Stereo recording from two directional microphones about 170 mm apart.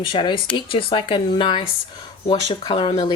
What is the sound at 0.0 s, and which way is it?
Speech, 30° left (ahead or behind).